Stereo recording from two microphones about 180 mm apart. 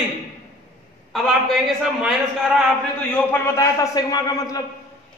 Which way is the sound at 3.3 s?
15° left (ahead or behind).